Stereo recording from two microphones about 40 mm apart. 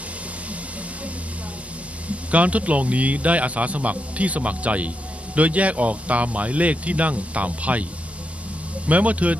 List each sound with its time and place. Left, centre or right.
2.0 s a man's voice: right